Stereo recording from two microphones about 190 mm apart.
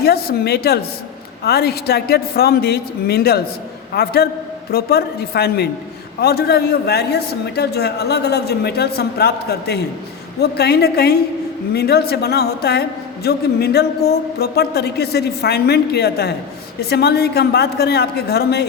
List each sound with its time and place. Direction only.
0.0 s a woman's voice: 55° left (ahead or behind)